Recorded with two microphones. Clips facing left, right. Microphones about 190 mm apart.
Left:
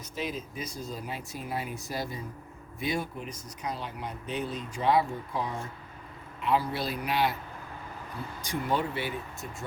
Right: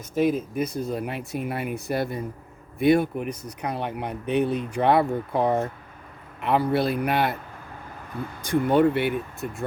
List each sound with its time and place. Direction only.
0.1 s speech: 50° right (ahead or behind)
8.4 s speech: 55° right (ahead or behind)